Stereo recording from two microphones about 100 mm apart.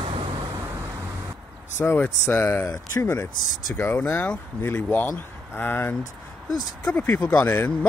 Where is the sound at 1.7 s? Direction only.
20° left (ahead or behind).